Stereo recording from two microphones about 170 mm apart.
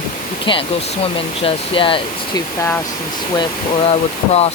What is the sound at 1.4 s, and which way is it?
Speech, 30° left (ahead or behind).